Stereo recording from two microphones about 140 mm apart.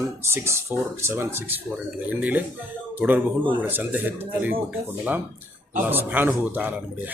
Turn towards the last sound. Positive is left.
turn(degrees=-15)  # may be behind; listen again after turning